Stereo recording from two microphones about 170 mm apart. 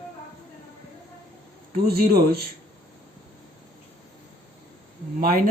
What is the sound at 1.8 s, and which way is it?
Speech, 65° right (ahead or behind).